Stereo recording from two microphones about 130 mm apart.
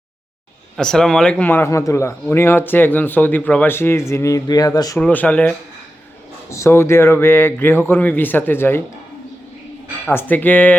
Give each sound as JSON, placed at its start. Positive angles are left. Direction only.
{"t": 0.8, "sound": "speech", "side_deg": 5}
{"t": 4.9, "sound": "speech", "side_deg": 10}
{"t": 10.1, "sound": "speech", "side_deg": 15}